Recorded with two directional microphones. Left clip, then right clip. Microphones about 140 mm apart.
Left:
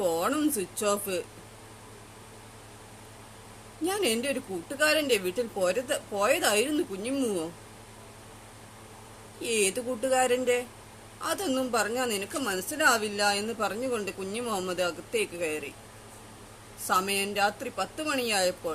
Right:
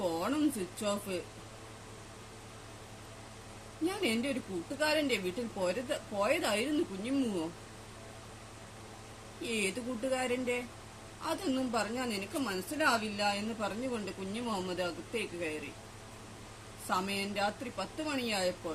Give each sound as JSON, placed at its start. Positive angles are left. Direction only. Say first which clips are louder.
{"t": 0.1, "sound": "a sound", "louder": "left 7 dB", "side_deg": 15}
{"t": 0.8, "sound": "a woman's voice", "louder": "left 8 dB", "side_deg": 15}
{"t": 3.8, "sound": "a woman's voice", "louder": "left 5 dB", "side_deg": 20}
{"t": 9.4, "sound": "a woman's voice", "louder": "left 7 dB", "side_deg": 20}
{"t": 16.9, "sound": "a woman's voice", "louder": "left 7 dB", "side_deg": 20}